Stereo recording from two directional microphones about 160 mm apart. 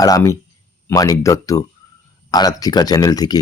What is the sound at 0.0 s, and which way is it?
Speech, 20° left (ahead or behind).